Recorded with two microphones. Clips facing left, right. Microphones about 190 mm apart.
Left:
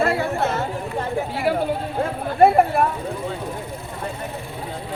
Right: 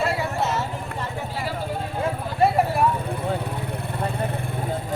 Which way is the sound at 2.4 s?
55° left (ahead or behind).